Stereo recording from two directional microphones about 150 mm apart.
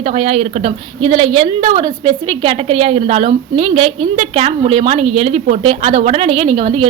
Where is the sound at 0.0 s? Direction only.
40° right (ahead or behind).